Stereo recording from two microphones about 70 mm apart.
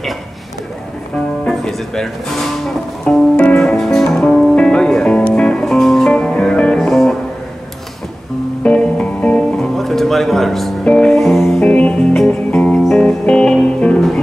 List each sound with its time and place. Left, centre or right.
1.5 s music: centre
3.1 s music: centre
8.6 s music: centre
9.8 s music: centre
11.1 s music: centre
11.6 s music: centre